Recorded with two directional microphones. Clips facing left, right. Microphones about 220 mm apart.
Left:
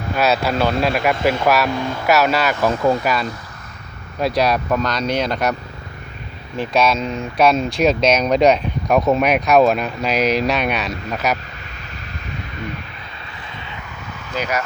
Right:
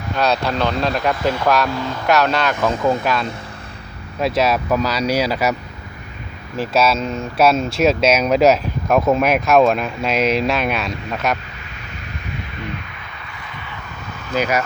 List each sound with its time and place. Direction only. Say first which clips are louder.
0.2 s speech: left 1 dB; 5° left (ahead or behind)
6.6 s speech: even; 5° right (ahead or behind)
14.3 s speech: right 4 dB; 5° right (ahead or behind)